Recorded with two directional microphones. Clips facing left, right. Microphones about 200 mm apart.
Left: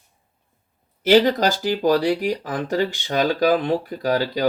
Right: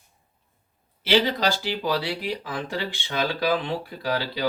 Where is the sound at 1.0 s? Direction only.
45° left (ahead or behind).